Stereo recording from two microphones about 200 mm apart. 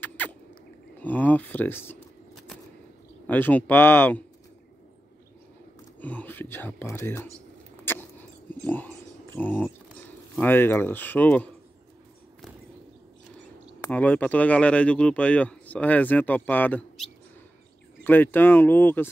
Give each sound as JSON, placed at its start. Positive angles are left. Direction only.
{"t": 0.0, "sound": "rodents", "side_deg": 10}
{"t": 1.0, "sound": "speech", "side_deg": 10}
{"t": 3.3, "sound": "speech", "side_deg": 10}
{"t": 5.9, "sound": "speech", "side_deg": 10}
{"t": 7.8, "sound": "dog", "side_deg": 10}
{"t": 9.3, "sound": "speech", "side_deg": 10}
{"t": 13.7, "sound": "speech", "side_deg": 10}